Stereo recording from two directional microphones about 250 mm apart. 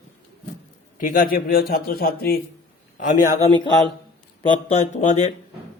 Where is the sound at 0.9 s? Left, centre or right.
Left.